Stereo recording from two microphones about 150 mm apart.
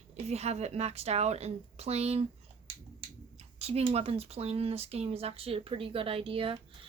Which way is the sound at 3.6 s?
45° right (ahead or behind).